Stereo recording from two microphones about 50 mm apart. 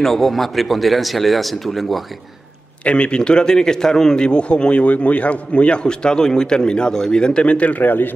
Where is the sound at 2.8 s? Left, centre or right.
Left.